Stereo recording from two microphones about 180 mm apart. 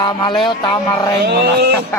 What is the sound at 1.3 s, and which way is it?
Speech, 65° right (ahead or behind).